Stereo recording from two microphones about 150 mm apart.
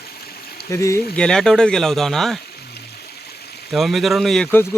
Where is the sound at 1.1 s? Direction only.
5° left (ahead or behind).